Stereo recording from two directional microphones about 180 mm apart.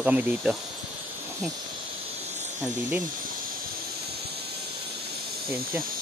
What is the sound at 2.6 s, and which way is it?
Speech, 10° right (ahead or behind).